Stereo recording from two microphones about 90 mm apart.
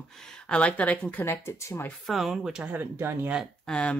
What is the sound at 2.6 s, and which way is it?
Speech, 20° right (ahead or behind).